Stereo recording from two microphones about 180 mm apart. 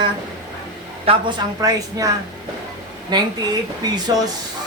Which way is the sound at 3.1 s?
20° right (ahead or behind).